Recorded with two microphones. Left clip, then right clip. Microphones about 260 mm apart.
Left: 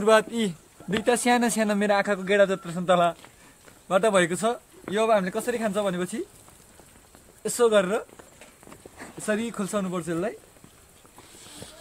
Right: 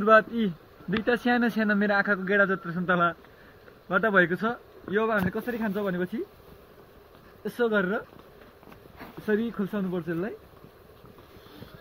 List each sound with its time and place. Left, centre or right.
0.0 s speech: centre
7.4 s speech: centre
9.3 s speech: centre